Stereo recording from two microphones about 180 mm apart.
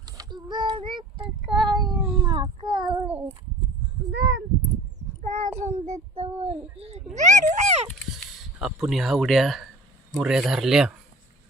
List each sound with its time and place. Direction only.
0.0 s child singing: 20° right (ahead or behind)
1.6 s cat: 25° right (ahead or behind)
1.9 s cat: centre (ahead or behind)
2.2 s child singing: 25° right (ahead or behind)
4.1 s a sound: 85° right
5.2 s child singing: 45° right (ahead or behind)
7.1 s a sound: 40° right (ahead or behind)
7.9 s a sound: centre (ahead or behind)
10.1 s speech: 5° right (ahead or behind)